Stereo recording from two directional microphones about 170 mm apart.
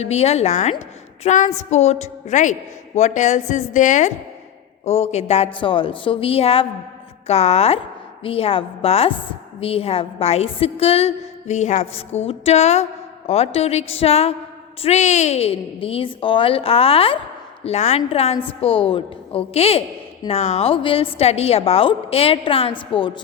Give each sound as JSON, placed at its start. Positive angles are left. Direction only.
{"t": 0.0, "sound": "a woman's voice", "side_deg": 40}